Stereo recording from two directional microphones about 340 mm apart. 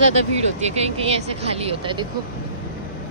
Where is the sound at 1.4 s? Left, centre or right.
Centre.